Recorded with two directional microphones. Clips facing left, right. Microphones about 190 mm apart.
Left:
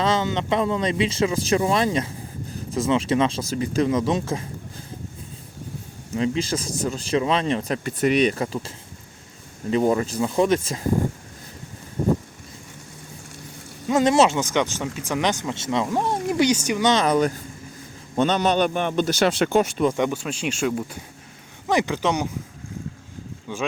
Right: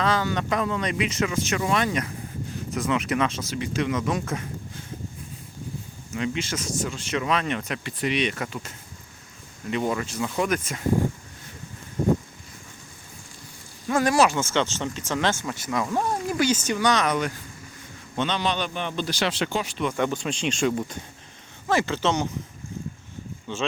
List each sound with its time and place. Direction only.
0.0 s speech: 25° left (ahead or behind)
6.1 s speech: 35° left (ahead or behind)
13.8 s speech: 20° left (ahead or behind)
16.9 s speech: 30° left (ahead or behind); by 19.8 s 50° left (ahead or behind)
19.9 s speech: 15° left (ahead or behind)
21.7 s speech: 15° left (ahead or behind)
23.5 s speech: 10° left (ahead or behind)